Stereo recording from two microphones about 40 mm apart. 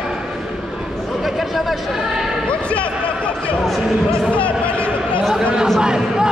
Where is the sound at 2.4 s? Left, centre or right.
Left.